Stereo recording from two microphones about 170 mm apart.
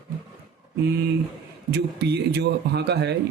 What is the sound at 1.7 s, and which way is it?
Speech, 80° right.